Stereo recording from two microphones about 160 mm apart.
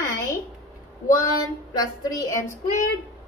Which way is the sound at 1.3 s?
25° left (ahead or behind).